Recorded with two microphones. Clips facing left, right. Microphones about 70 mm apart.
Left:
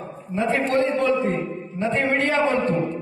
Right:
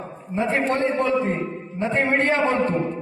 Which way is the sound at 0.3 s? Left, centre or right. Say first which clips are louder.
Left 1 dB; right.